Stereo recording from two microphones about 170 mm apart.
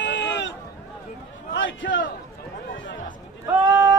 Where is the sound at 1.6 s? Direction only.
90° left.